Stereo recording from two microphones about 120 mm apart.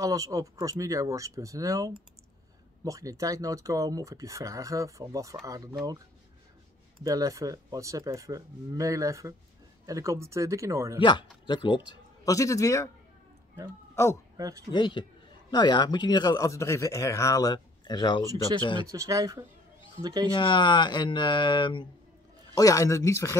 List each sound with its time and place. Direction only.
0.0 s speech: 25° right (ahead or behind)
7.0 s speech: 30° right (ahead or behind)
11.0 s speech: 40° left (ahead or behind)
12.3 s speech: 25° left (ahead or behind)
14.3 s a sound: 30° right (ahead or behind)
14.7 s speech: 40° left (ahead or behind)
18.9 s speech: 25° right (ahead or behind)
20.3 s speech: 40° left (ahead or behind)
22.5 s speech: 30° left (ahead or behind)